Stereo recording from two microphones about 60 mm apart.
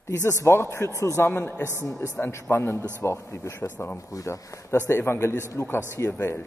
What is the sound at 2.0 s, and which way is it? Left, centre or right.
A man's voice, left.